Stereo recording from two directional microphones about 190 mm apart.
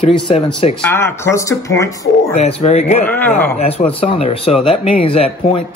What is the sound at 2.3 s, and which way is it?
Speech, 35° left (ahead or behind).